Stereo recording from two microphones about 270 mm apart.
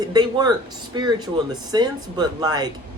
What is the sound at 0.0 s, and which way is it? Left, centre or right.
Speech, centre.